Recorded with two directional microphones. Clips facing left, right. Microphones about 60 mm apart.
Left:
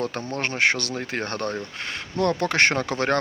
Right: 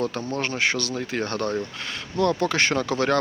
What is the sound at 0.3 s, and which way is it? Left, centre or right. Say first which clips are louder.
Speech: left 2 dB; left.